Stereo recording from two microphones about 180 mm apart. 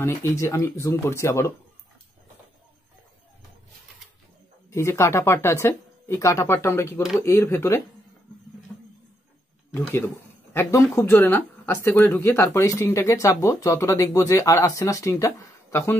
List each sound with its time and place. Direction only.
0.0 s speech: 15° left (ahead or behind)
4.6 s speech: 15° left (ahead or behind)
8.7 s a sound: 5° left (ahead or behind)
9.8 s speech: 15° left (ahead or behind)